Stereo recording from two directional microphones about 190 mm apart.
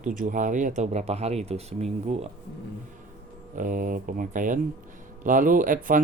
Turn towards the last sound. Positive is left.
turn(degrees=-45)  # may be behind; listen again after turning